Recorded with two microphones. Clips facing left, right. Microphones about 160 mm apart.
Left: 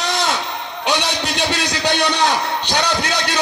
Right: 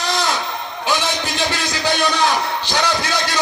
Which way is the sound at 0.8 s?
20° left (ahead or behind).